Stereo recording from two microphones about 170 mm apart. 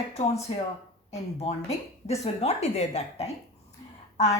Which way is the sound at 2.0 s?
40° left (ahead or behind).